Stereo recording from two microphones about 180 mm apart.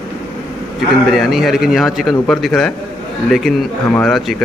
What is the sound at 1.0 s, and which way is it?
A man's voice, centre (ahead or behind).